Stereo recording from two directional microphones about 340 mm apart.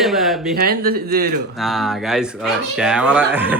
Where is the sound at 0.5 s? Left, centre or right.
Right.